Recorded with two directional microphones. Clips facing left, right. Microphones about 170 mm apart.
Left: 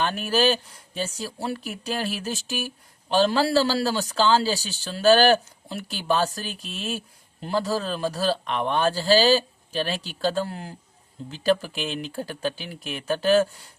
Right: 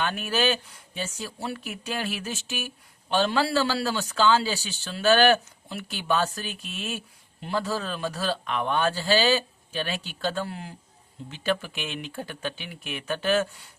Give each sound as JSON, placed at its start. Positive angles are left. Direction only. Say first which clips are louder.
{"t": 0.0, "sound": "speech", "louder": "left 4 dB", "side_deg": 35}